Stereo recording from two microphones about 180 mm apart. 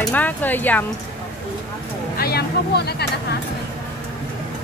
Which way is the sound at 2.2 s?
60° left (ahead or behind).